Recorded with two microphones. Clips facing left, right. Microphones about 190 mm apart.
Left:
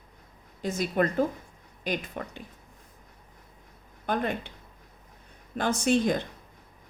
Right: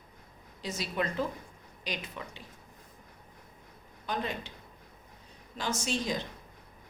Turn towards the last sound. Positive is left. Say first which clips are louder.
# left 9 dB
turn(degrees=55)  # may be behind; listen again after turning